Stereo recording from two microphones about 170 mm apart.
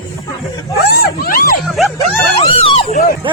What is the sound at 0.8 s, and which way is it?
Vehicle, 65° left (ahead or behind).